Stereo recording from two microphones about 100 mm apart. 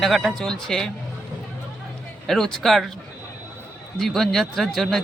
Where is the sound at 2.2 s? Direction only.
5° left (ahead or behind).